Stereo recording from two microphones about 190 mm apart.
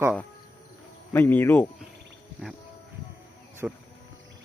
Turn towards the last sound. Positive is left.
turn(degrees=-5)  # may be behind; listen again after turning